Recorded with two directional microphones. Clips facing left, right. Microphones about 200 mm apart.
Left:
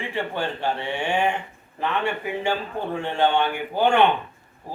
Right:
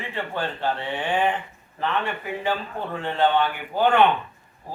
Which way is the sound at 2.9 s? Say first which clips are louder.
Even; 15° left (ahead or behind).